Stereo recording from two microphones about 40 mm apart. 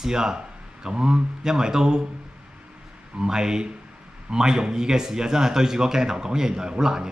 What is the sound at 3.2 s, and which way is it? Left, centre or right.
A man's voice, centre.